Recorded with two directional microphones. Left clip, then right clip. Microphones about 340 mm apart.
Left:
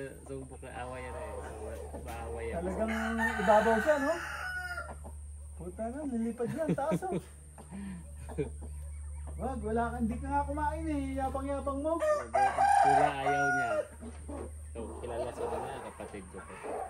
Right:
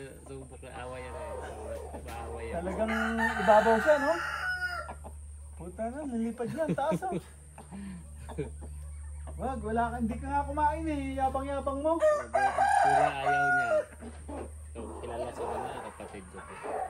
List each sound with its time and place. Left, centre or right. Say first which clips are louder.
0.0 s chicken: left 2 dB; centre
1.1 s chicken: right 2 dB; right
1.4 s chicken: right 3 dB; centre
5.6 s speech: right 2 dB; centre
9.4 s chicken: right 2 dB; centre
12.0 s chicken: right 1 dB; right
13.0 s chicken: right 2 dB; centre